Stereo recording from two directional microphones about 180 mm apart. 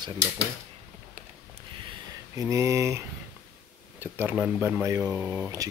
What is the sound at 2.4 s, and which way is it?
Speech, 15° right (ahead or behind).